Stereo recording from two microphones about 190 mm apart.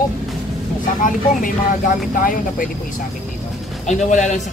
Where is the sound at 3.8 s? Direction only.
40° left (ahead or behind).